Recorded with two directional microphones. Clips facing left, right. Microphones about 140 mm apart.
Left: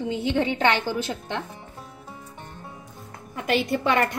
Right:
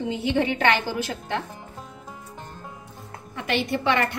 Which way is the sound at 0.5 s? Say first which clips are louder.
Even; 20° left (ahead or behind).